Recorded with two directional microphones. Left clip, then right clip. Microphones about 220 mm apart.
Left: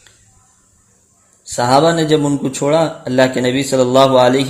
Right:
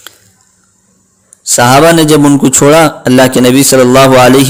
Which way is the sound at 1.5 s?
30° right (ahead or behind).